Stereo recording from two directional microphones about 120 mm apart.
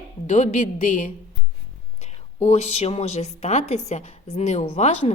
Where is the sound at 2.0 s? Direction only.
65° left (ahead or behind).